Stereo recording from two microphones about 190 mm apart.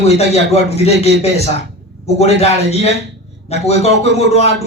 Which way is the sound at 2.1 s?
35° left (ahead or behind).